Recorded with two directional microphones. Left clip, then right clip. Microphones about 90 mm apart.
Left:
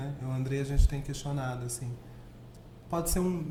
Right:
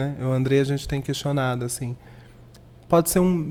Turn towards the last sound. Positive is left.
turn(degrees=-40)  # may be behind; listen again after turning